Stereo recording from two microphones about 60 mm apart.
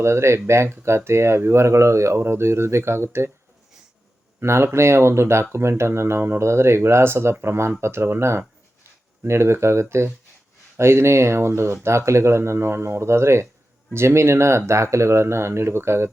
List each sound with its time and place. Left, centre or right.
0.0 s speech: right
4.4 s speech: right